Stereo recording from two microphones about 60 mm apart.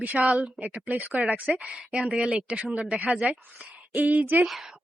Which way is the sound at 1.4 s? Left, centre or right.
Centre.